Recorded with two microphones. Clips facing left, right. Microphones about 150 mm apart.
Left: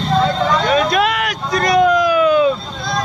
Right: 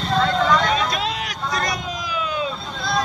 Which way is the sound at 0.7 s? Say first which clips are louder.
Left 7 dB; 65° left (ahead or behind).